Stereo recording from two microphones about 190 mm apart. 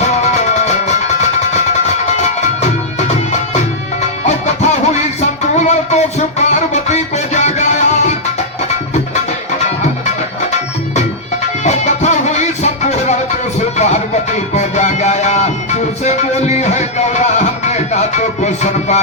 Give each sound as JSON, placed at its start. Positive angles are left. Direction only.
{"t": 0.3, "sound": "music", "side_deg": 35}
{"t": 4.4, "sound": "music", "side_deg": 35}
{"t": 5.5, "sound": "a sound", "side_deg": 35}
{"t": 11.6, "sound": "music", "side_deg": 35}